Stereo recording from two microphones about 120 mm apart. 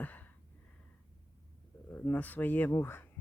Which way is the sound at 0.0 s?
15° left (ahead or behind).